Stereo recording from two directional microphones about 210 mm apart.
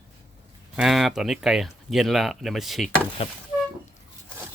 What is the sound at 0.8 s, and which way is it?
Speech, centre (ahead or behind).